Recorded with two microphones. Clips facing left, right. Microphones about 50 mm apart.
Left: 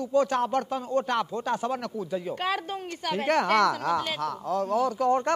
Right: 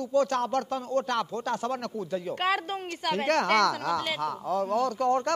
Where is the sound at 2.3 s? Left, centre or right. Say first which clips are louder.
Right 5 dB; right.